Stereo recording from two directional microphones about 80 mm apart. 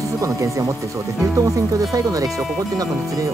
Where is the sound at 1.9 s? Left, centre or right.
Right.